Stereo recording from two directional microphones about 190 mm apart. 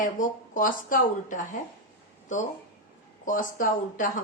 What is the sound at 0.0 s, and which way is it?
Speech, 45° left (ahead or behind).